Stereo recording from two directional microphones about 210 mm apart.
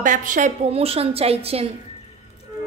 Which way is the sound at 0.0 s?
40° right (ahead or behind).